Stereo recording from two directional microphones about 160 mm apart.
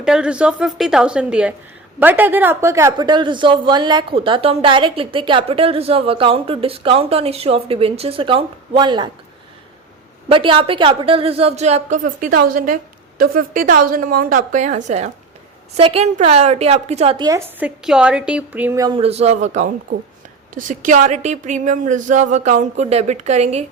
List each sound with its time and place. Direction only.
0.0 s a woman's voice: 5° right (ahead or behind); by 9.0 s 30° right (ahead or behind)
10.2 s a woman's voice: 30° right (ahead or behind)
17.2 s a woman's voice: 20° right (ahead or behind)
17.6 s a woman's voice: 5° right (ahead or behind)
18.9 s speech: 40° right (ahead or behind)